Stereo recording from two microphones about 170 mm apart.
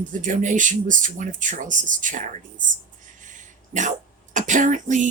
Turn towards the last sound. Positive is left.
turn(degrees=-45)  # may be behind; listen again after turning